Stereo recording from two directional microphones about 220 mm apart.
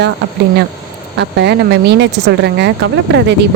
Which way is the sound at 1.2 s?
50° right (ahead or behind).